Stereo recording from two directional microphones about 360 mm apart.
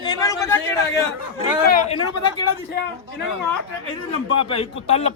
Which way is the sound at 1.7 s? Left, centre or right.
Centre.